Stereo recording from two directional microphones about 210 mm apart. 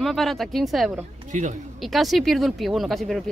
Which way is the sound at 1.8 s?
Centre (ahead or behind).